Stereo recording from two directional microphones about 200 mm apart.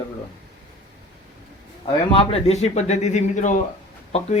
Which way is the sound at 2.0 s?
30° left (ahead or behind).